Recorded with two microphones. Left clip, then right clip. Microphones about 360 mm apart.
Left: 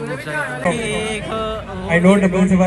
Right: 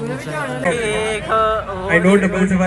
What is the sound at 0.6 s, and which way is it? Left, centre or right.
A man's voice, centre.